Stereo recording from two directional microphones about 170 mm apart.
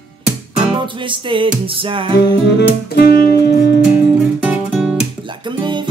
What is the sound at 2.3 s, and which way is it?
Music, 85° left.